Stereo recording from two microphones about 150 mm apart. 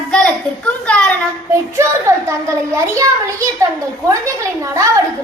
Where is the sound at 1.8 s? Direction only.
20° right (ahead or behind).